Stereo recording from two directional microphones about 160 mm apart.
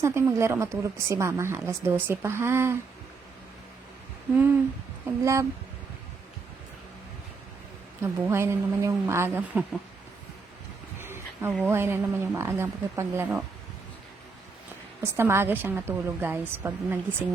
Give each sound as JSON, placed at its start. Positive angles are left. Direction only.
{"t": 0.0, "sound": "a woman's voice", "side_deg": -15}
{"t": 5.2, "sound": "speech", "side_deg": -20}
{"t": 8.0, "sound": "a woman's voice", "side_deg": -15}
{"t": 11.0, "sound": "a sound", "side_deg": -15}
{"t": 11.6, "sound": "a woman's voice", "side_deg": -15}
{"t": 15.0, "sound": "a woman's voice", "side_deg": -15}